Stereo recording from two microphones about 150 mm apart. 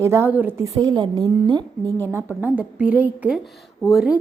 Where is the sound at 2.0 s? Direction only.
15° right (ahead or behind).